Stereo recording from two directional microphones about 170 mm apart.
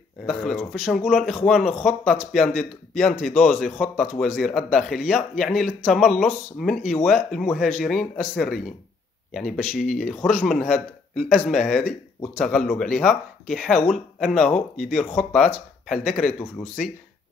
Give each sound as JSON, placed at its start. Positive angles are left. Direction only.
{"t": 0.3, "sound": "speech", "side_deg": 0}